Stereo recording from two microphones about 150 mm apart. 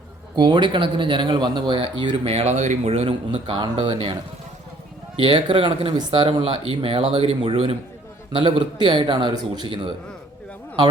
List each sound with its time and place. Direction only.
0.3 s speech: 30° right (ahead or behind)